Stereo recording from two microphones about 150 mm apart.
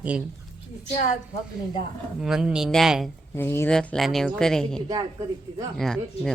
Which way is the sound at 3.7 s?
5° left (ahead or behind).